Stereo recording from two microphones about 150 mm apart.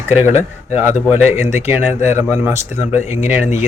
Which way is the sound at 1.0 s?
15° right (ahead or behind).